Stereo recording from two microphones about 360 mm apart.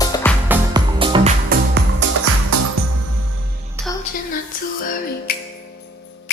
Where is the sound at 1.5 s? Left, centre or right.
Right.